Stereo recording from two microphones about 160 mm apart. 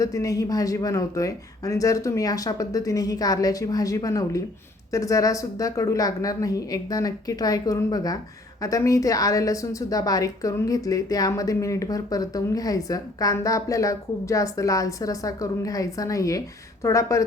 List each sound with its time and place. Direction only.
0.0 s a woman's voice: 20° left (ahead or behind)